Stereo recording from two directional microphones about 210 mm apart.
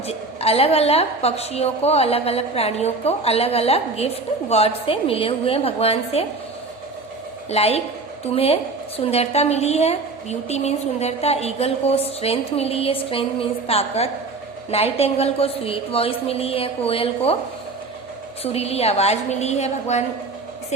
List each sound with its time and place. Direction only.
0.1 s a woman's voice: 30° left (ahead or behind)
7.5 s a woman's voice: 30° left (ahead or behind)
18.4 s a woman's voice: 30° left (ahead or behind)